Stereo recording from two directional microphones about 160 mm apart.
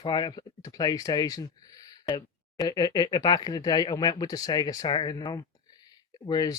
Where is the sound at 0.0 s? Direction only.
30° left (ahead or behind).